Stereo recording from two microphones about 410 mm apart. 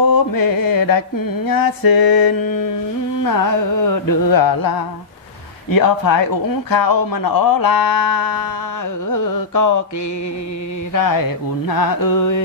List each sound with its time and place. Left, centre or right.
0.1 s mantra: left
1.5 s speech: left
3.3 s music: left
6.7 s speech: left
9.1 s music: left
10.9 s music: left